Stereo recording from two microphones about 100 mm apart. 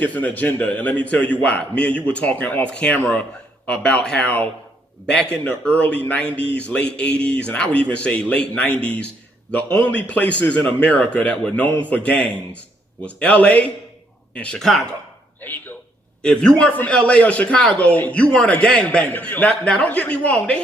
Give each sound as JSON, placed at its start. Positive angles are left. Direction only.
{"t": 0.0, "sound": "a man's voice", "side_deg": 15}
{"t": 15.4, "sound": "a man's voice", "side_deg": 20}
{"t": 19.5, "sound": "a man's voice", "side_deg": 5}